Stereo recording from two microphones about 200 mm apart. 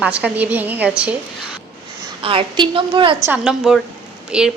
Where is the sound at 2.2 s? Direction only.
25° right (ahead or behind).